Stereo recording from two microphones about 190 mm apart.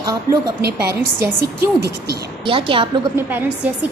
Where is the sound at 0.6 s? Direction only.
55° right (ahead or behind).